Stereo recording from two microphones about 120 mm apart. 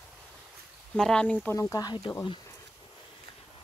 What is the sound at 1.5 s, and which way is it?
Speech, 30° left (ahead or behind).